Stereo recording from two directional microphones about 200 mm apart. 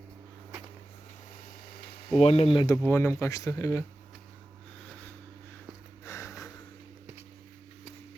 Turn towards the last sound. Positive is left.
turn(degrees=15)  # may be behind; listen again after turning